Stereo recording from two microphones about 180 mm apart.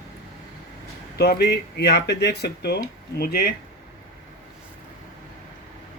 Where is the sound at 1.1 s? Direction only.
60° left (ahead or behind).